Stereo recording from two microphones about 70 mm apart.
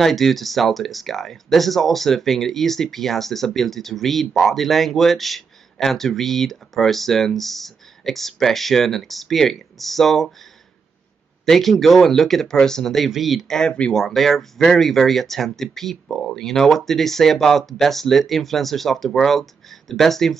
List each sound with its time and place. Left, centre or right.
0.0 s speech: centre
11.4 s speech: centre
14.0 s speech: centre